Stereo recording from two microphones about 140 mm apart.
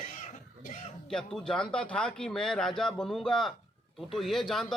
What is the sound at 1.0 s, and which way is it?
Speech, 5° left (ahead or behind).